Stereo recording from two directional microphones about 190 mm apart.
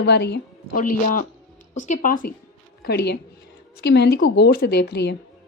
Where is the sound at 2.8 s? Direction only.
55° left (ahead or behind).